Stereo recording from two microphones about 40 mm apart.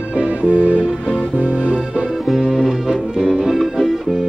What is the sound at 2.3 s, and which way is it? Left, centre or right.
Music, centre.